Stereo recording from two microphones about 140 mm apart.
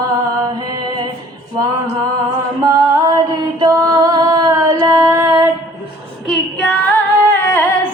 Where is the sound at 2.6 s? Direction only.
25° right (ahead or behind).